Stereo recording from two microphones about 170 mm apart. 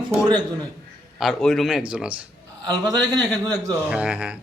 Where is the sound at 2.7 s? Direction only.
20° right (ahead or behind).